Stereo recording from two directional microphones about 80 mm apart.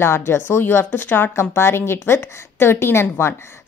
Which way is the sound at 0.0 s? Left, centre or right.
Left.